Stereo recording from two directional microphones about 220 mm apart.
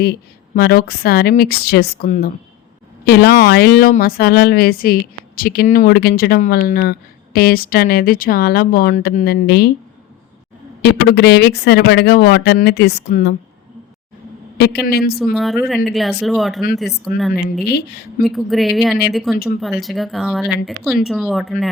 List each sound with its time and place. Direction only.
0.0 s speech: 45° left (ahead or behind)
3.1 s speech: 50° left (ahead or behind)
10.8 s speech: 50° left (ahead or behind)
14.6 s speech: 45° left (ahead or behind)
15.2 s speech: centre (ahead or behind)